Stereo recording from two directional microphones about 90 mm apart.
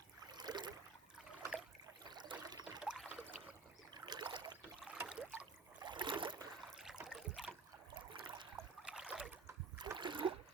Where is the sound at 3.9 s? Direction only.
55° right (ahead or behind).